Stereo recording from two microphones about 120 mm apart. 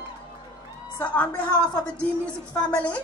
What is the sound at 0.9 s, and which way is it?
Speech, 15° left (ahead or behind).